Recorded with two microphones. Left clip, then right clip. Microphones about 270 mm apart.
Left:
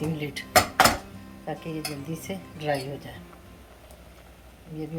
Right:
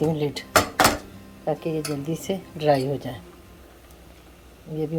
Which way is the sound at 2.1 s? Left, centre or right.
Right.